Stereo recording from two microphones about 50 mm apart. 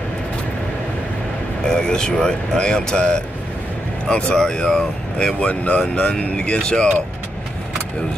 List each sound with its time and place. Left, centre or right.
1.6 s speech: centre
5.5 s speech: left
5.8 s speech: centre